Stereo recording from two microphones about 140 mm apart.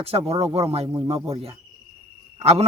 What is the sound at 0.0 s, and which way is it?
Speech, 45° right (ahead or behind).